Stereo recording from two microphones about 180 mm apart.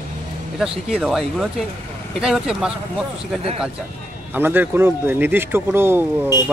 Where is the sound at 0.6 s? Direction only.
Centre (ahead or behind).